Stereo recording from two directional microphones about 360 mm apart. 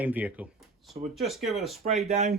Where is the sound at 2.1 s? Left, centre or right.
Centre.